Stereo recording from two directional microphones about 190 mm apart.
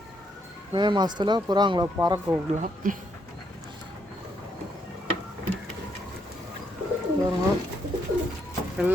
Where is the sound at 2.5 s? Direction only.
40° right (ahead or behind).